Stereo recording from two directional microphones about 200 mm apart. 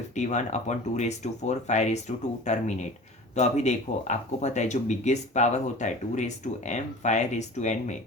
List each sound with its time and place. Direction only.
0.2 s speech: 35° left (ahead or behind)